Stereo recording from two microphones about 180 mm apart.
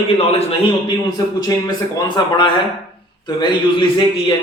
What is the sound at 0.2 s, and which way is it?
Speech, 35° left (ahead or behind).